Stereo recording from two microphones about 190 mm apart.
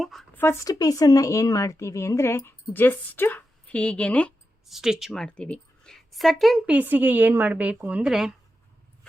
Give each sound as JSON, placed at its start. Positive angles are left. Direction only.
{"t": 0.0, "sound": "speech", "side_deg": 0}
{"t": 0.4, "sound": "speech", "side_deg": 20}